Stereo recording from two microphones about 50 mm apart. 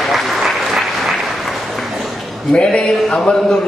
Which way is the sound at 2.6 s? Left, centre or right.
Centre.